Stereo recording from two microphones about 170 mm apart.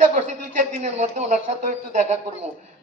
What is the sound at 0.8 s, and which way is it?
Speech, 40° right (ahead or behind).